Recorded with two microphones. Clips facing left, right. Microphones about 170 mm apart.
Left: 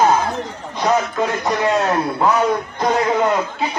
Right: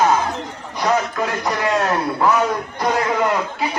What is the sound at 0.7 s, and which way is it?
Speech, 20° left (ahead or behind).